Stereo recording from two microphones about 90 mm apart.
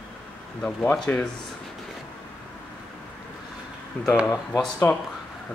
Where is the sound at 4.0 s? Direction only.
20° left (ahead or behind).